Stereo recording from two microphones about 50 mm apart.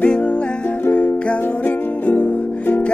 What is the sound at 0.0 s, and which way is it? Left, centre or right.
Music, left.